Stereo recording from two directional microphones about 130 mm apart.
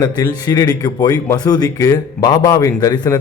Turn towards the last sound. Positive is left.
turn(degrees=25)  # may be behind; listen again after turning